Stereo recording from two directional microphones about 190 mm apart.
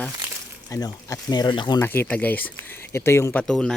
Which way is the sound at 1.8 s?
10° left (ahead or behind).